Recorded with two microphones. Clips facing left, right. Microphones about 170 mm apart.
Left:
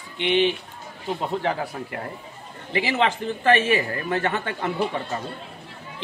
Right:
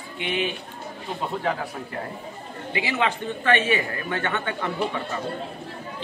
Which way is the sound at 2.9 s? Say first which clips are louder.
Left 1 dB; 35° left (ahead or behind).